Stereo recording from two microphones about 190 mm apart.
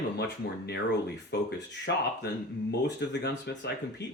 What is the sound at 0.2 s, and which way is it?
Speech, 60° left (ahead or behind).